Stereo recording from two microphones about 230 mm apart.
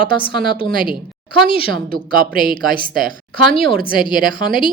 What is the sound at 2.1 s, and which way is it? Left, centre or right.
Speech, right.